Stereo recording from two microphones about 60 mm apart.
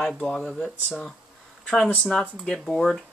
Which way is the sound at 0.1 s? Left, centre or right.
Centre.